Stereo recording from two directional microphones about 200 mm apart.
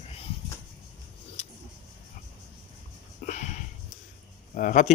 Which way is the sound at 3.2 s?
35° left (ahead or behind).